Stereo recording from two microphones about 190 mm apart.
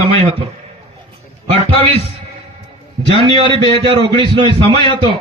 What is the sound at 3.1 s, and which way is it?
A man's voice, 30° right (ahead or behind).